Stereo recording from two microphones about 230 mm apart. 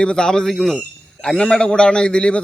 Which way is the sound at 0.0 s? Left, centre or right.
Centre.